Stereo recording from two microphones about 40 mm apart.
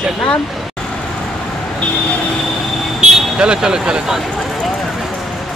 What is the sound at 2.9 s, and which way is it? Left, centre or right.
Vehicle, centre.